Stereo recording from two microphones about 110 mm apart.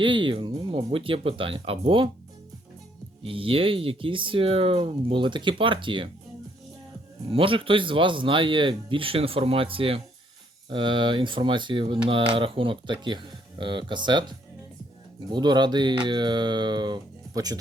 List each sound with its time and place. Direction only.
0.0 s speech: 50° right (ahead or behind)
3.2 s speech: 55° right (ahead or behind)
7.3 s speech: 55° right (ahead or behind); by 17.6 s 35° right (ahead or behind)